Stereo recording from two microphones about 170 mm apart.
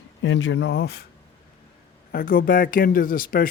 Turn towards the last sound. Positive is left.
turn(degrees=55)  # may be behind; listen again after turning